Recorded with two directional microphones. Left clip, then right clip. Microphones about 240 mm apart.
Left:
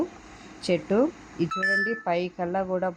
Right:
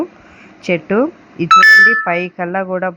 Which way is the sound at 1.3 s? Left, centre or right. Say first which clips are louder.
Right 19 dB; right.